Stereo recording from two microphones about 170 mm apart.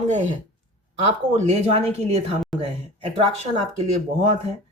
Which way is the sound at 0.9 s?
40° right (ahead or behind).